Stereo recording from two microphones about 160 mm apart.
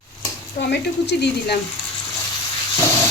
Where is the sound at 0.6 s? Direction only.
90° left.